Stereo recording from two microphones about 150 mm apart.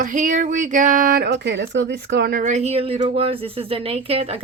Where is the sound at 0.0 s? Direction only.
60° right (ahead or behind); by 1.3 s 75° right (ahead or behind).